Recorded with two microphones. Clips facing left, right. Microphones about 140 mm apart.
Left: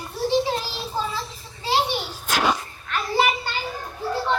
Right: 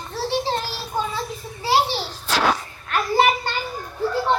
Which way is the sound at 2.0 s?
5° left (ahead or behind).